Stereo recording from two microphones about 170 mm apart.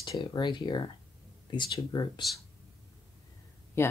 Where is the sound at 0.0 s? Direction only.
25° left (ahead or behind).